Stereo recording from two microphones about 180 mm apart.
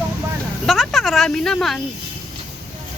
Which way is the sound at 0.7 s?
Centre (ahead or behind).